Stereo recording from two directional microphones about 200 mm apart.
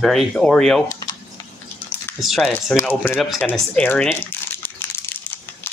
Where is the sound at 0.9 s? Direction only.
15° left (ahead or behind).